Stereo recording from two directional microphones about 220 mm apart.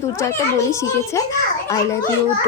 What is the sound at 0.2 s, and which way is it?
Speech, 15° left (ahead or behind).